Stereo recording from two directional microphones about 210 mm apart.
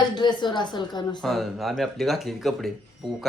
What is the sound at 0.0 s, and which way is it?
A woman's voice, 20° left (ahead or behind).